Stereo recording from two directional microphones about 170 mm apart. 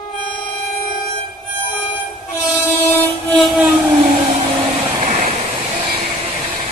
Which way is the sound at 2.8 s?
15° left (ahead or behind).